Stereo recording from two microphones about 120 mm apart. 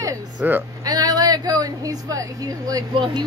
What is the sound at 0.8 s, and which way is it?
A woman's voice, 30° right (ahead or behind).